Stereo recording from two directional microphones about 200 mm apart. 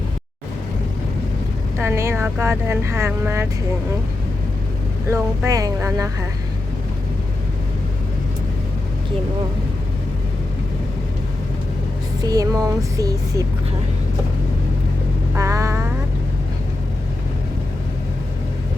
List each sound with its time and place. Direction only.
1.8 s speech: 15° right (ahead or behind)
5.1 s speech: 15° right (ahead or behind)
12.2 s speech: 20° right (ahead or behind)
15.4 s vehicle: 15° right (ahead or behind)